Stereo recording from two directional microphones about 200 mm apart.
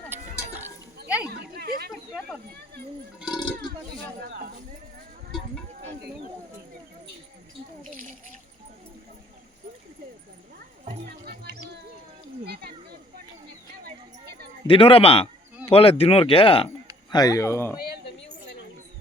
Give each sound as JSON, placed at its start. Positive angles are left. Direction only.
{"t": 0.1, "sound": "sheep", "side_deg": -10}
{"t": 1.0, "sound": "a sound", "side_deg": -5}
{"t": 1.3, "sound": "a sound", "side_deg": -50}
{"t": 3.2, "sound": "speech", "side_deg": -5}
{"t": 7.9, "sound": "speech", "side_deg": -40}
{"t": 14.7, "sound": "speech", "side_deg": 25}